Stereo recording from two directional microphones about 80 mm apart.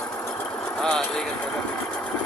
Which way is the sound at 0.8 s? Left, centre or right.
Centre.